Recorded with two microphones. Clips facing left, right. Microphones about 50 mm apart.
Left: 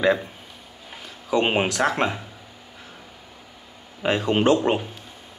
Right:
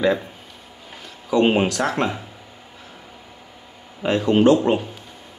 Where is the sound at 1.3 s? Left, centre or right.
Left.